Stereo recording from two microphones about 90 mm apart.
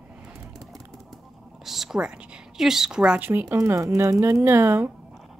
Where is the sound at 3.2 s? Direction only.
25° right (ahead or behind).